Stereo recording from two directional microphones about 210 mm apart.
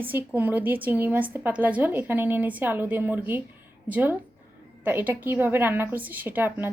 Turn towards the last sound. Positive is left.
turn(degrees=-10)  # may be behind; listen again after turning